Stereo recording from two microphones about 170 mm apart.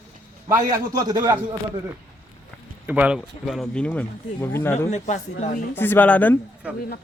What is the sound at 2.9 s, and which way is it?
Speech, 5° right (ahead or behind).